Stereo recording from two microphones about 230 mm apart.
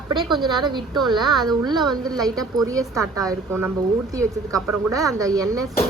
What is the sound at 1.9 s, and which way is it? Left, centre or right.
A woman's voice, centre.